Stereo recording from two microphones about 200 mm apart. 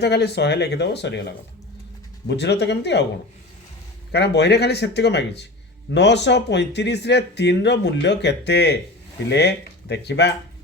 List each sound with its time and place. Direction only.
0.0 s speech: 55° left (ahead or behind)
4.1 s speech: 55° left (ahead or behind)